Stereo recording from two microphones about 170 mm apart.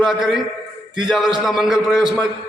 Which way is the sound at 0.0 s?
Centre (ahead or behind).